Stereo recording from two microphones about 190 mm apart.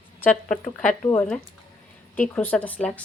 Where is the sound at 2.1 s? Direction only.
10° left (ahead or behind).